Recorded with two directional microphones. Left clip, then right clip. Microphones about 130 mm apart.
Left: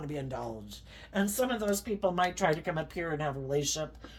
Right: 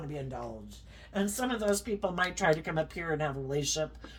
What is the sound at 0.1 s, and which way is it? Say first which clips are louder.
Speech: left 3 dB; 80° left.